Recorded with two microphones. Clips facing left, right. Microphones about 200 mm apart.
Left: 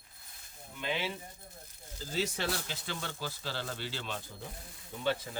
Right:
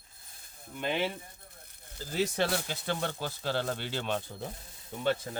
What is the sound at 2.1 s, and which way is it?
Speech, 50° right (ahead or behind).